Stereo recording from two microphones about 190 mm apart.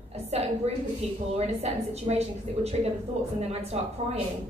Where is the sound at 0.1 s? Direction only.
35° right (ahead or behind).